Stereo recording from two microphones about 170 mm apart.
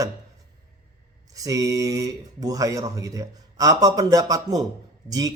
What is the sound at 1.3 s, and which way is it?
A man's voice, 20° right (ahead or behind).